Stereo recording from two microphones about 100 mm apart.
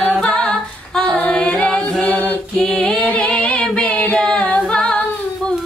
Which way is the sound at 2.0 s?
15° left (ahead or behind).